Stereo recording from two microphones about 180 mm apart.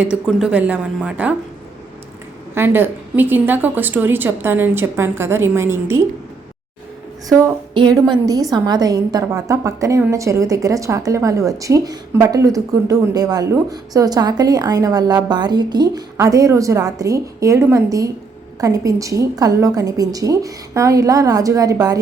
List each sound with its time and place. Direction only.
0.0 s a woman's voice: 5° right (ahead or behind)
2.6 s a woman's voice: 10° right (ahead or behind)
7.3 s a woman's voice: 20° right (ahead or behind)